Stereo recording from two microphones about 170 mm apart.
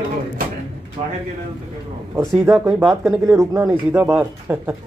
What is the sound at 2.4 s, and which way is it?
Speech, 15° right (ahead or behind).